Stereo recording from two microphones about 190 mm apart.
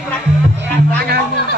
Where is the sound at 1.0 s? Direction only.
55° right (ahead or behind).